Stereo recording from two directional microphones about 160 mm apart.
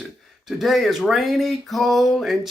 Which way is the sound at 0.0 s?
Centre (ahead or behind).